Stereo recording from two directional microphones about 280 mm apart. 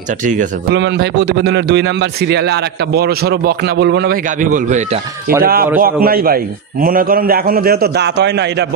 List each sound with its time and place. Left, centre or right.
0.2 s a man's voice: right